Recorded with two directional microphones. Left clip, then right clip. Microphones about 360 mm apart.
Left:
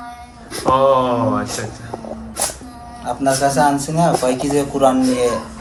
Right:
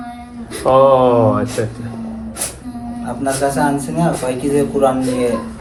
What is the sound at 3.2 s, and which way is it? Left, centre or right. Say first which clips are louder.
Music: left 2 dB; centre.